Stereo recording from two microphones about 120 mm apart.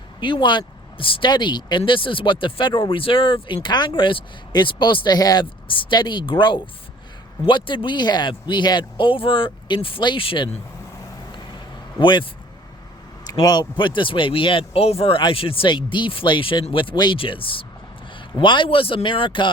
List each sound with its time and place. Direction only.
0.2 s speech: 40° left (ahead or behind)
11.9 s speech: 40° left (ahead or behind)
13.4 s speech: 35° left (ahead or behind)